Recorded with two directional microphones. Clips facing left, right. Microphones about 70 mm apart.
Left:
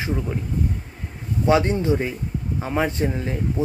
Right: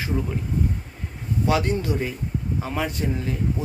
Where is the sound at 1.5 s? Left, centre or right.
Left.